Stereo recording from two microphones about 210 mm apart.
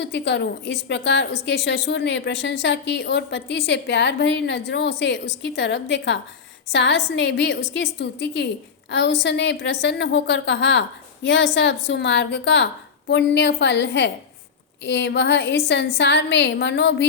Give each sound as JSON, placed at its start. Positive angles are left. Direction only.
{"t": 0.0, "sound": "a woman's voice", "side_deg": 55}